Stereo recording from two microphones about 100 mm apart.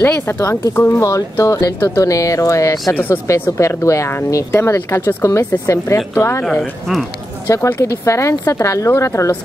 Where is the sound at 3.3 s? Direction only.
30° left (ahead or behind).